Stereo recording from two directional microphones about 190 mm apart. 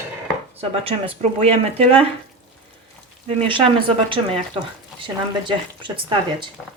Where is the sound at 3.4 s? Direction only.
25° right (ahead or behind).